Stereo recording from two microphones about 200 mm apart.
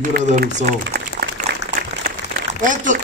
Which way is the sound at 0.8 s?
55° right (ahead or behind).